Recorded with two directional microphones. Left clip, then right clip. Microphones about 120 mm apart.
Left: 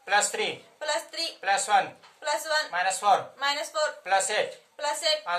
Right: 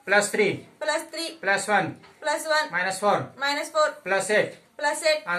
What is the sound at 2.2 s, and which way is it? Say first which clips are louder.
Speech: right 3 dB; 25° left (ahead or behind).